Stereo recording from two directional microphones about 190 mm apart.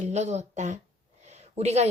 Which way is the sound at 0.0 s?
35° right (ahead or behind).